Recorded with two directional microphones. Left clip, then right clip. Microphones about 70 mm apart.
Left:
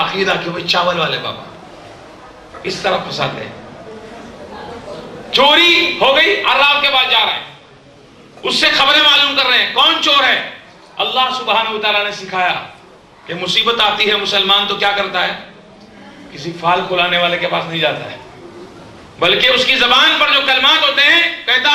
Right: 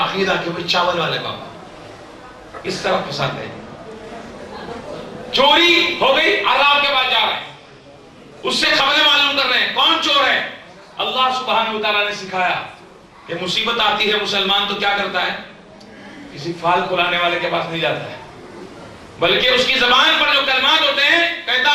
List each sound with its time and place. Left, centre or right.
0.0 s a man's voice: left
2.6 s a man's voice: left
5.3 s a man's voice: left
8.4 s a man's voice: left
16.3 s a man's voice: left
19.2 s a man's voice: left